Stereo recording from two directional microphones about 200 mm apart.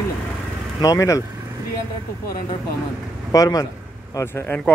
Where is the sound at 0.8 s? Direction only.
15° left (ahead or behind).